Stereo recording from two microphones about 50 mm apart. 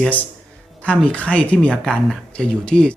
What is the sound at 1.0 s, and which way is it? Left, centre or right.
Speech, left.